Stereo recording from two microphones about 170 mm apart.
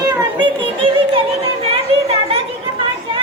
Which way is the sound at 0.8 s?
35° right (ahead or behind).